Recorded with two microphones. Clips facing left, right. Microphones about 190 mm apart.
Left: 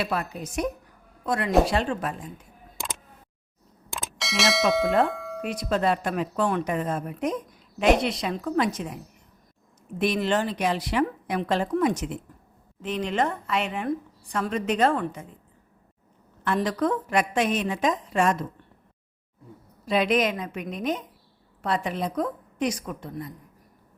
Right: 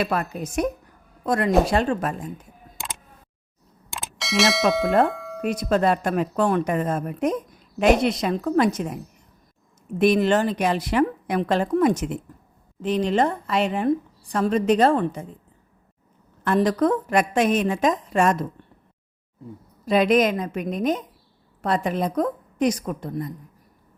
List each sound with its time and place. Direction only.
0.0 s a woman's voice: 50° right (ahead or behind)
3.9 s bell: centre (ahead or behind)
5.0 s tubular bells: centre (ahead or behind)
5.6 s a woman's voice: 50° right (ahead or behind)
10.0 s a woman's voice: 50° right (ahead or behind)
12.8 s speech: 35° right (ahead or behind)
16.4 s a woman's voice: 45° right (ahead or behind)
19.8 s a woman's voice: 45° right (ahead or behind)